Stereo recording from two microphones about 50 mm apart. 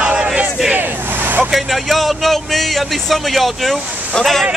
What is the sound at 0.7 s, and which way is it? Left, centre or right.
Vehicle, right.